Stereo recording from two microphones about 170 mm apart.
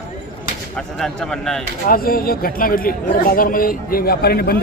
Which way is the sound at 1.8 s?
60° left (ahead or behind).